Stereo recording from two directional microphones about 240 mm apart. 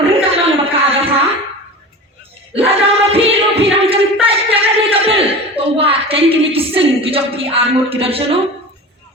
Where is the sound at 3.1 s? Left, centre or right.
Right.